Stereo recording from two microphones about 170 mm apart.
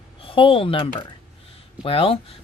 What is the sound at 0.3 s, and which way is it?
Speech, 30° left (ahead or behind).